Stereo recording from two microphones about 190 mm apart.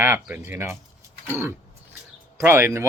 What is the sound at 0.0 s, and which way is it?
Speech, 10° right (ahead or behind).